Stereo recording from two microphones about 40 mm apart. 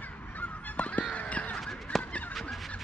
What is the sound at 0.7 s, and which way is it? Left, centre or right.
Honk, left.